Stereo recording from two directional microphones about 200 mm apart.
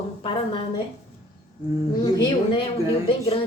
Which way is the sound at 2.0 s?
20° left (ahead or behind).